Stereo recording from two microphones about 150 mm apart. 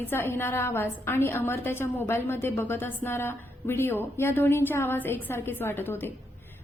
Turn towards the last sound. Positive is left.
turn(degrees=15)  # may be behind; listen again after turning